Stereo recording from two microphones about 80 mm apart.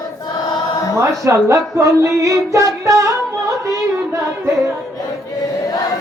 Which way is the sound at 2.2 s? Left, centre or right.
Right.